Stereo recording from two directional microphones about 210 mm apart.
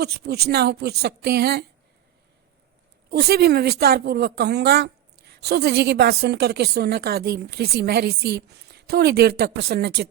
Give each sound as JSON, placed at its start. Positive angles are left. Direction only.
{"t": 0.0, "sound": "speech", "side_deg": -50}
{"t": 3.1, "sound": "speech", "side_deg": -50}